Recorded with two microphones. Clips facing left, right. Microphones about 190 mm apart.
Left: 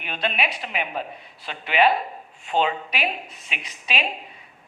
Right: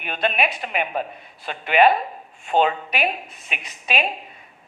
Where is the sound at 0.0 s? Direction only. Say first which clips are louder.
Right 4 dB; 50° right (ahead or behind).